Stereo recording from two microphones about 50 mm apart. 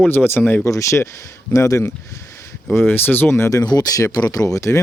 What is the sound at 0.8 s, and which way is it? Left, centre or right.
Speech, left.